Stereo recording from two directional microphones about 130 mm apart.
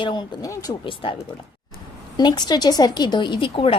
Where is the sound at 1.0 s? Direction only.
45° left (ahead or behind).